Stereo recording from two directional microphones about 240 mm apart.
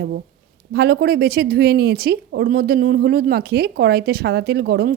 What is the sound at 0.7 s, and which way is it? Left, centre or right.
Speech, right.